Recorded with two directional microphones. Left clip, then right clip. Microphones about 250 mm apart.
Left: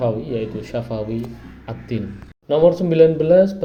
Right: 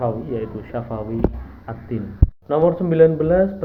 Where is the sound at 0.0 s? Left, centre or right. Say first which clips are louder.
Left 2 dB; left.